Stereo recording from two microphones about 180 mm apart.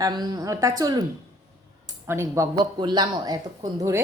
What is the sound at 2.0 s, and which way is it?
Speech, 15° right (ahead or behind).